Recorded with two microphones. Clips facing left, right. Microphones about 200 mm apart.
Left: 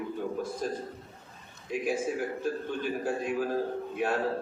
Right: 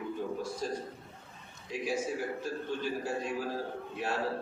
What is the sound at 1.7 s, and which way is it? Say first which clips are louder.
A man's voice: left 3 dB; 55° left (ahead or behind).